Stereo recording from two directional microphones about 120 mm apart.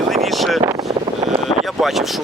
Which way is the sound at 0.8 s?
60° right (ahead or behind).